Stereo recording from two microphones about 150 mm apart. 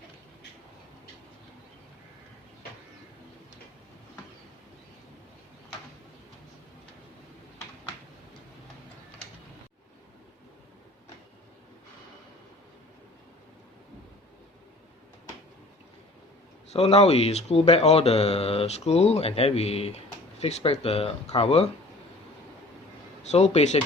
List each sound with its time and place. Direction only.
16.7 s speech: 45° left (ahead or behind)
23.3 s speech: 50° left (ahead or behind)